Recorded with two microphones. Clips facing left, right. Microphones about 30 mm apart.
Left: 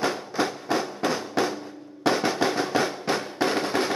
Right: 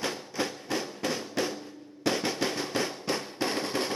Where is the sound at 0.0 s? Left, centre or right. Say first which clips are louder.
Left 6 dB; left.